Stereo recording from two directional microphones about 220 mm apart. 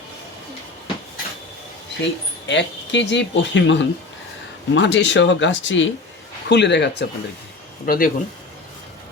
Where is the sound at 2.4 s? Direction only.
55° left (ahead or behind).